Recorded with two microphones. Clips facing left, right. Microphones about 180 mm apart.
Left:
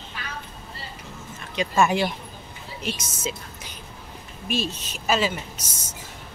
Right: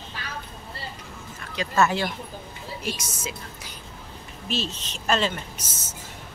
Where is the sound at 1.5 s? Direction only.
15° left (ahead or behind).